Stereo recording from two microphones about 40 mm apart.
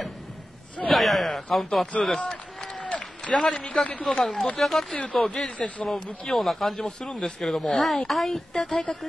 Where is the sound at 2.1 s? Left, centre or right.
Centre.